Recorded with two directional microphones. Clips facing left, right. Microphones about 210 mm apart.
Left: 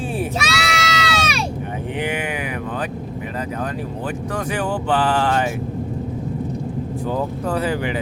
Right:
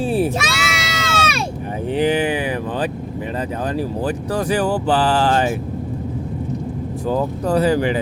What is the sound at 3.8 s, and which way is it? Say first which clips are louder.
Speech: right 5 dB; 35° right (ahead or behind).